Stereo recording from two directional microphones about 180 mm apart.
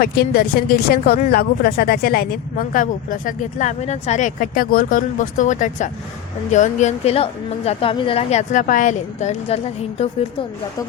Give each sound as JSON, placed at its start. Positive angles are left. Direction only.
{"t": 0.0, "sound": "a woman's voice", "side_deg": 55}